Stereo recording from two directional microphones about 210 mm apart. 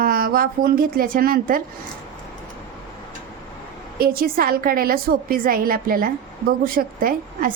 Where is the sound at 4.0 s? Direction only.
45° right (ahead or behind).